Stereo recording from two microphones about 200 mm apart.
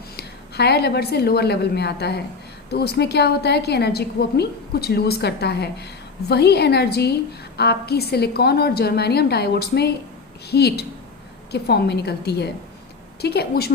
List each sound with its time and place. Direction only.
0.2 s a woman's voice: 55° left (ahead or behind)